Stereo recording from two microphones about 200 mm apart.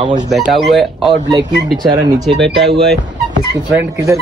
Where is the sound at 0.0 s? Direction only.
20° right (ahead or behind).